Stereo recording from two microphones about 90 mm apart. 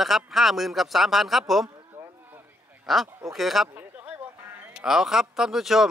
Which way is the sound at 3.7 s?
20° right (ahead or behind).